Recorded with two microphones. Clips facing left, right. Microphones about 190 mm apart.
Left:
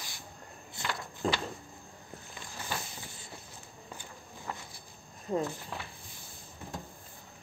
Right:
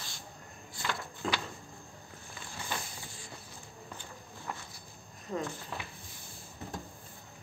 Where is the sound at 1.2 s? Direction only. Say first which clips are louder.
Left 3 dB; 35° left (ahead or behind).